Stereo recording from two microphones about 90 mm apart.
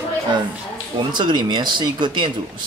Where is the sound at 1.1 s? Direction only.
60° right (ahead or behind).